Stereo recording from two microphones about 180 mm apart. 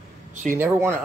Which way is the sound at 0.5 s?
15° right (ahead or behind).